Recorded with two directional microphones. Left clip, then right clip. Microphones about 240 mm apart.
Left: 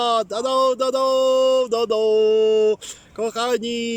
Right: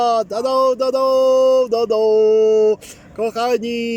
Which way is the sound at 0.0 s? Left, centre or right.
Centre.